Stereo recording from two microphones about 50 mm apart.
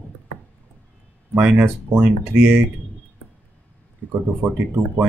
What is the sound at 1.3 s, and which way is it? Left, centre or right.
Speech, right.